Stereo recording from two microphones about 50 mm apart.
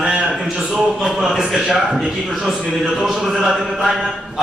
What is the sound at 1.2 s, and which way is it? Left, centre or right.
Speech, centre.